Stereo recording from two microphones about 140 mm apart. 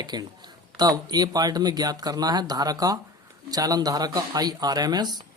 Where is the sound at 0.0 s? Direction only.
30° right (ahead or behind).